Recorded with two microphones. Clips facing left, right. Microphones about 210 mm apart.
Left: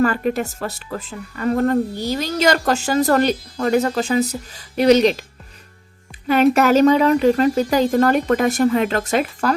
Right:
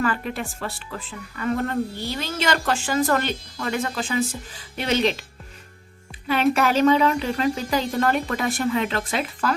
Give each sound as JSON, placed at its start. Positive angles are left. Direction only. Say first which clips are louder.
{"t": 0.0, "sound": "speech", "louder": "left 7 dB", "side_deg": 40}
{"t": 6.5, "sound": "speech", "louder": "left 3 dB", "side_deg": 40}